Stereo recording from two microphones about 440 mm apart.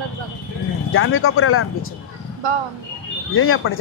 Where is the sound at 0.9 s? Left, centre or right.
Left.